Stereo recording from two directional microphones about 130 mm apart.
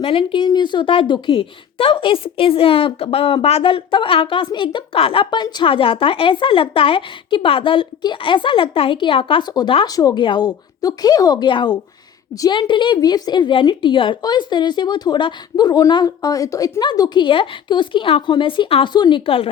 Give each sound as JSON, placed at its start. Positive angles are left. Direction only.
{"t": 0.0, "sound": "a woman's voice", "side_deg": 45}